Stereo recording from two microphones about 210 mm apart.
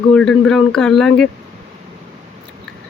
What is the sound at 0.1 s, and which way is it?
Speech, 5° left (ahead or behind).